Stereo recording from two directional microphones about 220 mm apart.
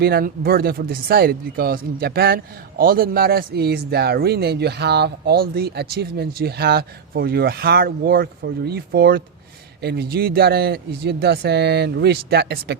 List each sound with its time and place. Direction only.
0.0 s speech: 45° right (ahead or behind)